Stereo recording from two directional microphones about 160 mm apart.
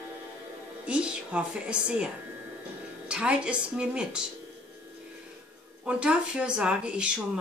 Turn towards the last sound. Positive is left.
turn(degrees=-5)  # may be behind; listen again after turning